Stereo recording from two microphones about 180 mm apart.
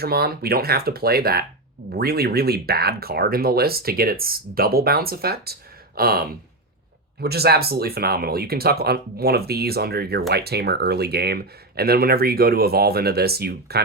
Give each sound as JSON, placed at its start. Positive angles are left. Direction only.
{"t": 0.0, "sound": "speech", "side_deg": -60}